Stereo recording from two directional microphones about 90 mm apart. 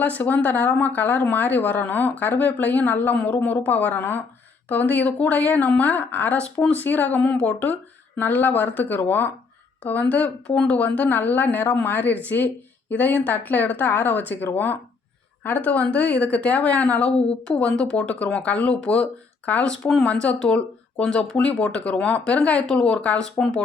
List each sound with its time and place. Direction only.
0.0 s speech: 20° left (ahead or behind)